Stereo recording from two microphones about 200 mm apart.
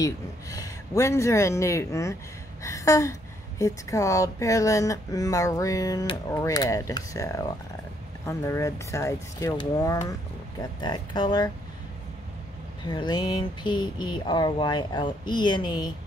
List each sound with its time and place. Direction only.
0.0 s a woman's voice: 15° left (ahead or behind)
12.8 s speech: 20° left (ahead or behind)